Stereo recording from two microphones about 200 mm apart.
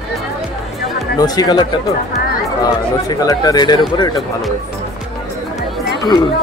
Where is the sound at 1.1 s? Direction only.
20° left (ahead or behind).